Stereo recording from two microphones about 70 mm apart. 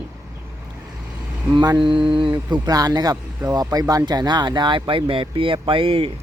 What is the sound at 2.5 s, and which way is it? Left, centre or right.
Speech, right.